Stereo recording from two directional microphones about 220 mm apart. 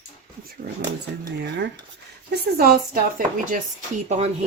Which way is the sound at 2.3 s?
45° right (ahead or behind).